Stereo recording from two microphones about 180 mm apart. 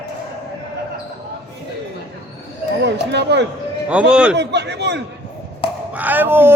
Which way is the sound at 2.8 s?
70° right (ahead or behind).